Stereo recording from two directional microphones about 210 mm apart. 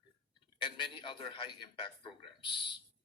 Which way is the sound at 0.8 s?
25° left (ahead or behind).